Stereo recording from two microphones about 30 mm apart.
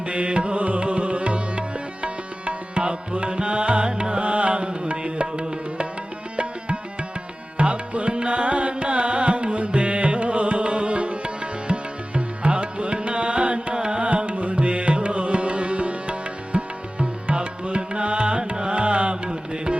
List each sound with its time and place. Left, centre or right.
0.1 s music: right
13.7 s music: right
14.0 s music: right